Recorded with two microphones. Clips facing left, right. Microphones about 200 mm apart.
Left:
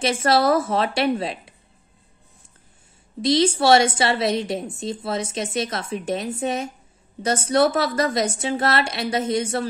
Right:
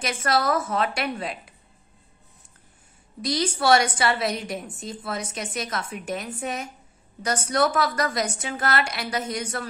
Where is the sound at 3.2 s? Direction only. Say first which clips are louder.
Left 7 dB; 25° left (ahead or behind).